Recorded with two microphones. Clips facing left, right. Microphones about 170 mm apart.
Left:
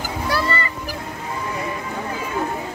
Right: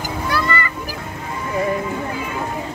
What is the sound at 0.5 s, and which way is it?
Music, 35° left (ahead or behind).